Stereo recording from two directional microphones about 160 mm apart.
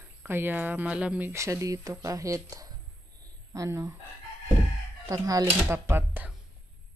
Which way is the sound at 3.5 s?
20° right (ahead or behind).